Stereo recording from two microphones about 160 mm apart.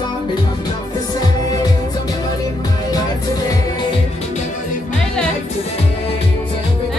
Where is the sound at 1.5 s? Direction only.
25° left (ahead or behind).